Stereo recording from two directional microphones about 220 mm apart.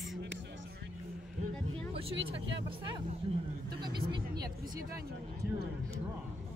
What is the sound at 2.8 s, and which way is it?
Speech, 20° right (ahead or behind).